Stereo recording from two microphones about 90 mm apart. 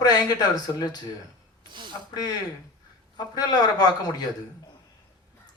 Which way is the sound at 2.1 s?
45° left (ahead or behind).